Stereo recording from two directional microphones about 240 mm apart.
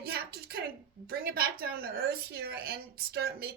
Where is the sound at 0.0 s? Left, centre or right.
Right.